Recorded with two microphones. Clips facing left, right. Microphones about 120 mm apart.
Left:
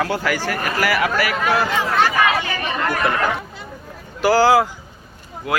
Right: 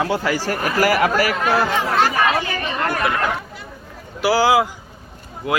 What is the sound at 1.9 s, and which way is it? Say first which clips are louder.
Chatter: left 1 dB; 35° right (ahead or behind).